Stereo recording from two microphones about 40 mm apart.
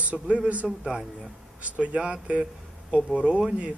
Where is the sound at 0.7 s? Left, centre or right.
Right.